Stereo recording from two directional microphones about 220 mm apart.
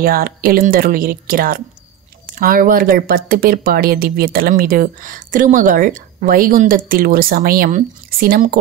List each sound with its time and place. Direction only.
0.0 s speech: 40° right (ahead or behind)